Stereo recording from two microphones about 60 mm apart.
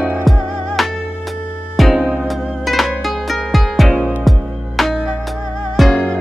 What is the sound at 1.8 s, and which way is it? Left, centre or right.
Music, centre.